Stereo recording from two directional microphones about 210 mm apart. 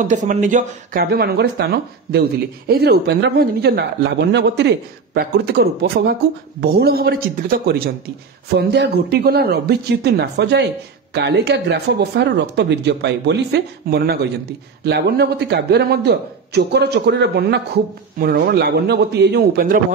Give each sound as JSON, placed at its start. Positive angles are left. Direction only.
{"t": 0.0, "sound": "speech", "side_deg": -35}